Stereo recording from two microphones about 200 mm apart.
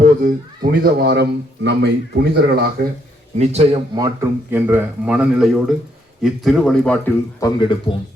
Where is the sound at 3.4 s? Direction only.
30° right (ahead or behind).